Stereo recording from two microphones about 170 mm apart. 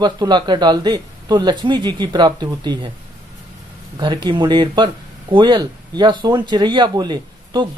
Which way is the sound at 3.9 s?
25° right (ahead or behind).